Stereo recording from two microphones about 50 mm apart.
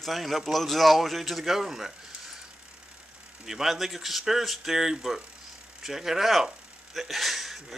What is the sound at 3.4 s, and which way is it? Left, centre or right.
Speech, centre.